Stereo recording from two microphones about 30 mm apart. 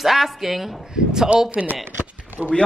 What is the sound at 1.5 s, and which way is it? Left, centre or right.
Speech, right.